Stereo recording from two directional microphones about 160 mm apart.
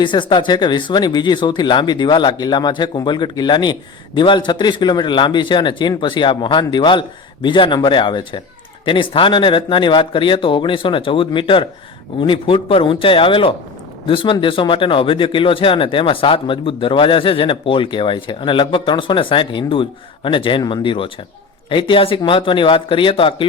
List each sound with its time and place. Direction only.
0.0 s speech: 30° left (ahead or behind)